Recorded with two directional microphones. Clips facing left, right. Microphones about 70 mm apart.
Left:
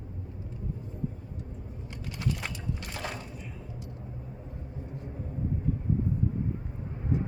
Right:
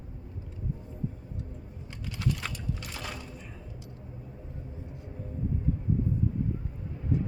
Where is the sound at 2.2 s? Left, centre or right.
Centre.